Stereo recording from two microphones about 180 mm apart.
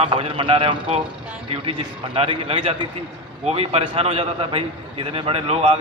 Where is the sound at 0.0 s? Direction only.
30° right (ahead or behind).